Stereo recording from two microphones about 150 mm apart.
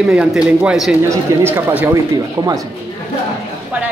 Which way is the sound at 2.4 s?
25° right (ahead or behind).